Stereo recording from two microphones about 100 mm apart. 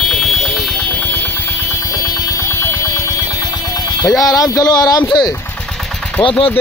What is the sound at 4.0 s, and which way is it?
Speech, 40° left (ahead or behind).